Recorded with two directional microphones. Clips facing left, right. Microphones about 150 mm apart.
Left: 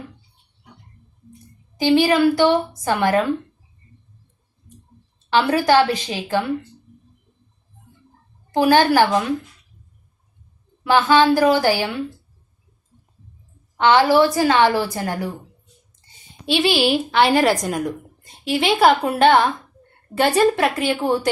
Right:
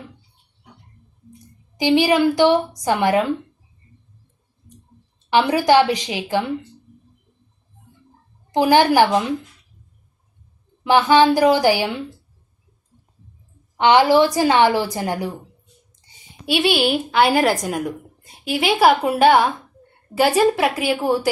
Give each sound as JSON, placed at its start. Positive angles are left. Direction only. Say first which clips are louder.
{"t": 1.7, "sound": "a woman's voice", "louder": "even", "side_deg": -15}
{"t": 5.3, "sound": "a woman's voice", "louder": "right 1 dB", "side_deg": -15}
{"t": 8.5, "sound": "a woman's voice", "louder": "right 1 dB", "side_deg": -15}
{"t": 10.8, "sound": "a woman's voice", "louder": "right 1 dB", "side_deg": -15}
{"t": 13.7, "sound": "a woman's voice", "louder": "right 1 dB", "side_deg": -15}
{"t": 16.5, "sound": "a woman's voice", "louder": "even", "side_deg": 0}